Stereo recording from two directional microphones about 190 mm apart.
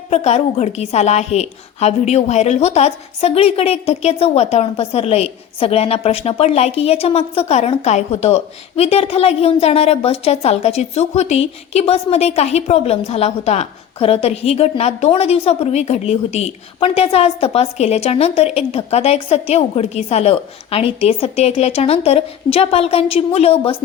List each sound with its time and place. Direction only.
0.1 s a woman's voice: 35° left (ahead or behind)